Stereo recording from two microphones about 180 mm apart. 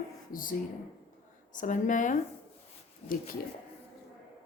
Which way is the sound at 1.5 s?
45° left (ahead or behind).